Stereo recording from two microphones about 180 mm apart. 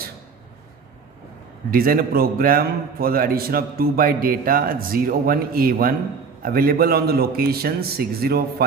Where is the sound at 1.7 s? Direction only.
55° right (ahead or behind).